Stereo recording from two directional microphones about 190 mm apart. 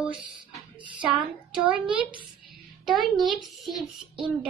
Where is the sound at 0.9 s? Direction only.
5° right (ahead or behind).